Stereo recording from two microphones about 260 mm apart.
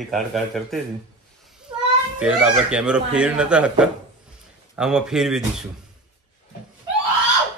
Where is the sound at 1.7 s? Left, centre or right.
Centre.